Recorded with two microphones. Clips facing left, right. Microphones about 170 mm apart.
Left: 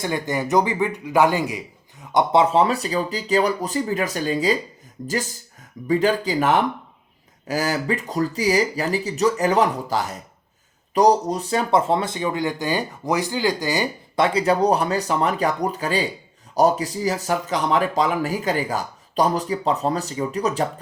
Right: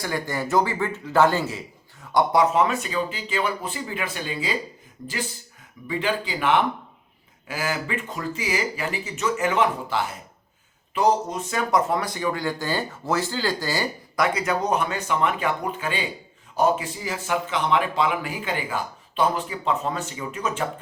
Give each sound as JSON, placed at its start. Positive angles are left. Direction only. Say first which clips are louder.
{"t": 0.0, "sound": "a man's voice", "louder": "left 3 dB", "side_deg": 20}
{"t": 14.3, "sound": "speech", "louder": "left 5 dB", "side_deg": 30}